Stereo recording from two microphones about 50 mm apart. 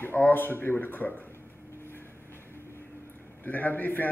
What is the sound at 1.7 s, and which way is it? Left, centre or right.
Vehicle, left.